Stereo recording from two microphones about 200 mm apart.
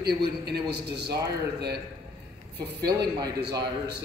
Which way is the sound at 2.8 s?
55° right (ahead or behind).